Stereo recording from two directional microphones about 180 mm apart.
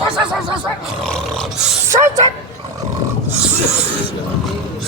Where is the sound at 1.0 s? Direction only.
Centre (ahead or behind).